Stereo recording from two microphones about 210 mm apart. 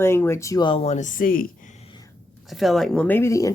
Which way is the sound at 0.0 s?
10° left (ahead or behind).